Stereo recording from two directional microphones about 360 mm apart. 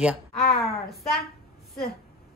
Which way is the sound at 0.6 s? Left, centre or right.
Centre.